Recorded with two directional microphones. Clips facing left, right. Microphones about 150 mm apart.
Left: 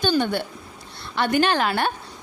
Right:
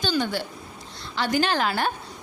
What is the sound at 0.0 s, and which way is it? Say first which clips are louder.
A woman's voice: left 4 dB; 55° left (ahead or behind).